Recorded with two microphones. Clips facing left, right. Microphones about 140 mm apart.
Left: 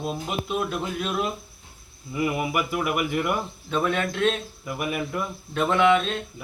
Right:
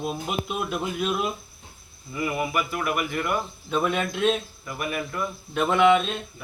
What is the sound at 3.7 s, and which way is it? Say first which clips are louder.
Speech: even; 10° right (ahead or behind).